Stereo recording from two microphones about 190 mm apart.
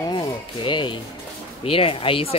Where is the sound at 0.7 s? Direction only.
25° left (ahead or behind).